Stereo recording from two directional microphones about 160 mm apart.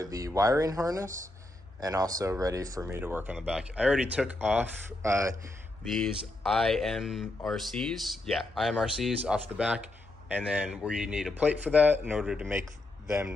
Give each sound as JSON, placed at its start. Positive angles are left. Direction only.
{"t": 0.0, "sound": "a man's voice", "side_deg": -20}
{"t": 5.9, "sound": "a man's voice", "side_deg": 0}